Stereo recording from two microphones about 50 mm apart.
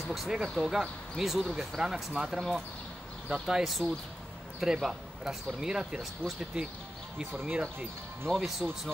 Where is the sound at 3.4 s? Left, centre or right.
Centre.